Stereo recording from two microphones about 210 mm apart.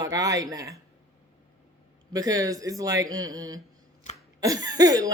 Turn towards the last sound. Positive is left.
turn(degrees=-20)  # may be behind; listen again after turning